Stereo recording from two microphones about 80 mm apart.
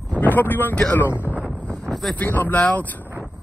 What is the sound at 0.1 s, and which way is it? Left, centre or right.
Speech, left.